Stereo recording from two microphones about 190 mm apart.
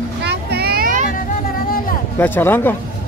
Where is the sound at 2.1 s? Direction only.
10° left (ahead or behind).